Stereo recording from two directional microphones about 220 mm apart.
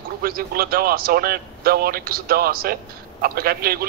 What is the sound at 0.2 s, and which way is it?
A man's voice, 40° right (ahead or behind).